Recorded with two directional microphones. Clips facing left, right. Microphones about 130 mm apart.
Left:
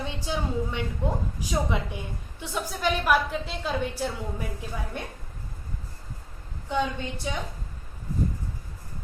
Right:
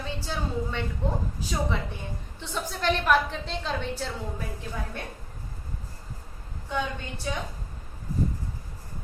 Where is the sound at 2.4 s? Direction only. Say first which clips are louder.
Left 3 dB; 10° left (ahead or behind).